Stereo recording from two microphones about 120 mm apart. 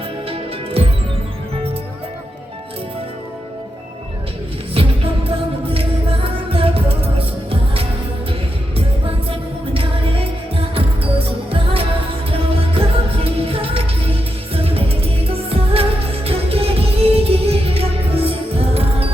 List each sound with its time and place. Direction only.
0.3 s music: 50° right (ahead or behind)
4.7 s music: 50° right (ahead or behind)
9.7 s music: 50° right (ahead or behind)